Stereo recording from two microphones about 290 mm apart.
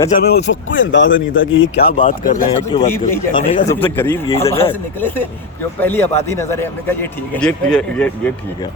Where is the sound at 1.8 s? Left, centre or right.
Left.